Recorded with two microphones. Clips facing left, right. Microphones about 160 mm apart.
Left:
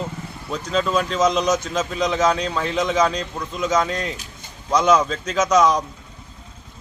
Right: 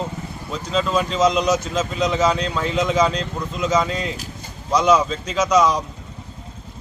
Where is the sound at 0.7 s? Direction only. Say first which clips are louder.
Even; 5° left (ahead or behind).